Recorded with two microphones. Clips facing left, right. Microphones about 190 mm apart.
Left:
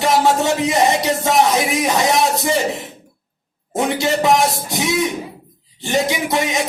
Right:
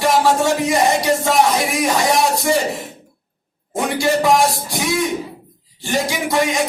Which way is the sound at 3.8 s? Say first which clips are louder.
Even; 20° left (ahead or behind).